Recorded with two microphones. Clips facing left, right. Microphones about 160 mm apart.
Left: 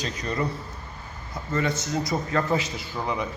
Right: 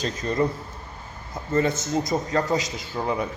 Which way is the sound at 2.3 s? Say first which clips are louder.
Right 1 dB; 40° right (ahead or behind).